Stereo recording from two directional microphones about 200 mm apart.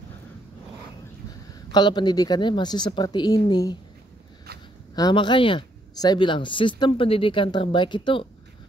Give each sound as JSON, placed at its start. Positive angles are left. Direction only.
{"t": 1.5, "sound": "speech", "side_deg": 20}
{"t": 4.9, "sound": "speech", "side_deg": 20}